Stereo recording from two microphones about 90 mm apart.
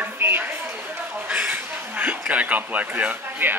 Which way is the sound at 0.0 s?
25° right (ahead or behind).